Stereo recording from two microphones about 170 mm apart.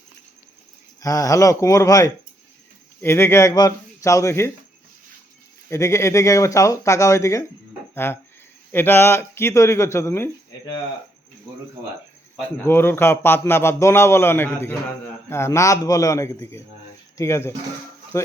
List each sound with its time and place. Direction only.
1.0 s a man's voice: 20° left (ahead or behind)
5.6 s a man's voice: 15° left (ahead or behind)
12.6 s a man's voice: 15° left (ahead or behind)